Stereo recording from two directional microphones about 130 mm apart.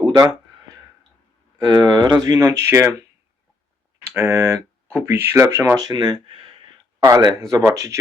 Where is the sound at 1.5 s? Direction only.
35° right (ahead or behind).